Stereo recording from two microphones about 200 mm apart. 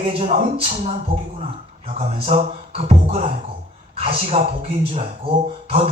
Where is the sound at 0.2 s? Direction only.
30° right (ahead or behind).